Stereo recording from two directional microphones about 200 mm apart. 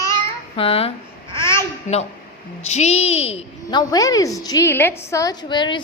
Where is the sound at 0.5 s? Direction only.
30° left (ahead or behind).